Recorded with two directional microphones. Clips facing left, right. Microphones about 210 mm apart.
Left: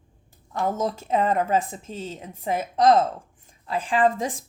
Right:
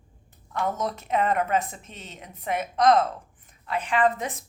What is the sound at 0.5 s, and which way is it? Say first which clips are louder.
Speech: left 3 dB; 30° left (ahead or behind).